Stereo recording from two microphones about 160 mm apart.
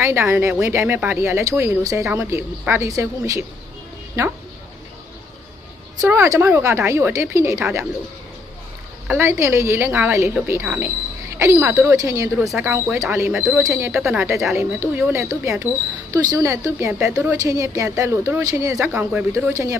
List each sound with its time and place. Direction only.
0.0 s speech: 15° right (ahead or behind)
6.0 s speech: 15° right (ahead or behind)
9.0 s speech: 15° right (ahead or behind)
12.4 s speech: 5° right (ahead or behind)
13.3 s speech: centre (ahead or behind)
13.7 s a woman's voice: 15° right (ahead or behind)